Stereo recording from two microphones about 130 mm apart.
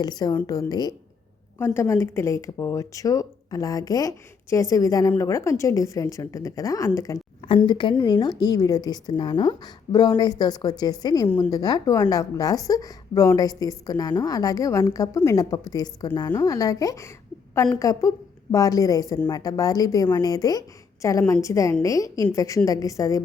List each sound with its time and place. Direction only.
0.0 s a woman's voice: 30° left (ahead or behind)
7.4 s a woman's voice: 40° left (ahead or behind)
11.3 s a woman's voice: 10° left (ahead or behind)
11.5 s speech: 30° left (ahead or behind)